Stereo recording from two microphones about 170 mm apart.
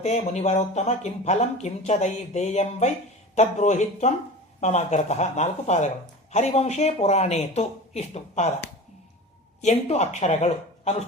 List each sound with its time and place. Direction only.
0.0 s speech: 40° left (ahead or behind)
9.6 s speech: 40° left (ahead or behind)